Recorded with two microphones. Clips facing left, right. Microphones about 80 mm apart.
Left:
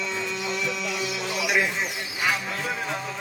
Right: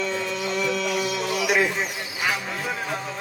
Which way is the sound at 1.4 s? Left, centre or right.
Right.